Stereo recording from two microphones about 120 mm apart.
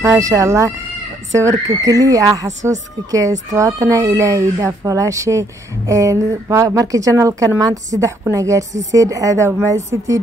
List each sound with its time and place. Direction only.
0.0 s speech: 30° right (ahead or behind)